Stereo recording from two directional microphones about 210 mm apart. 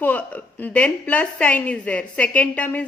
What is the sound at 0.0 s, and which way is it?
Speech, 5° left (ahead or behind).